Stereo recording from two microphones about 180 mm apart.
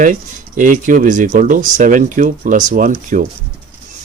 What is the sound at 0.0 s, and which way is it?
Speech, 45° right (ahead or behind).